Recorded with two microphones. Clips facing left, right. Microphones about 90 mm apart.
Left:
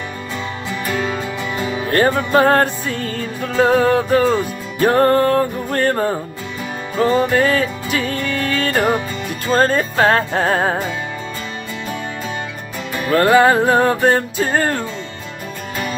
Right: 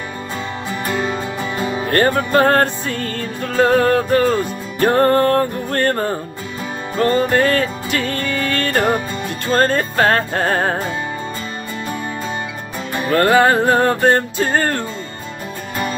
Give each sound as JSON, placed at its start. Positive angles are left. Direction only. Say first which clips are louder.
{"t": 0.9, "sound": "music", "louder": "even", "side_deg": -20}
{"t": 1.9, "sound": "music", "louder": "left 1 dB", "side_deg": 0}
{"t": 13.1, "sound": "music", "louder": "left 1 dB", "side_deg": 0}